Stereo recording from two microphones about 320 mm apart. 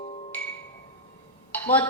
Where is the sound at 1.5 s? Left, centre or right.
Centre.